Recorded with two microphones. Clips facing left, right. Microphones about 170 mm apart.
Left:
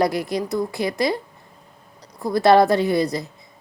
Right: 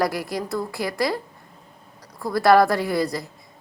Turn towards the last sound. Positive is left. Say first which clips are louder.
# left 3 dB
turn(degrees=20)  # may be behind; listen again after turning